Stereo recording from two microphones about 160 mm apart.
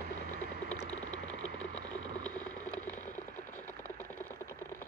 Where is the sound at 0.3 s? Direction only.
70° right (ahead or behind).